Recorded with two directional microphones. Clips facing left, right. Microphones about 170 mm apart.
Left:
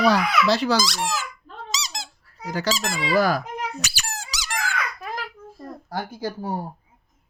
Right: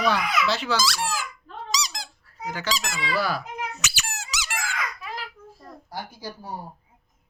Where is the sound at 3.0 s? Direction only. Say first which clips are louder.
Left 7 dB; 45° left (ahead or behind).